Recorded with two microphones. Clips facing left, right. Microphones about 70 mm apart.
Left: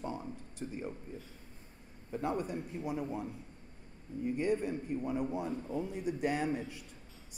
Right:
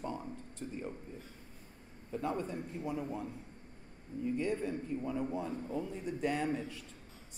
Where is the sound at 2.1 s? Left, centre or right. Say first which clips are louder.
Left 1 dB; centre.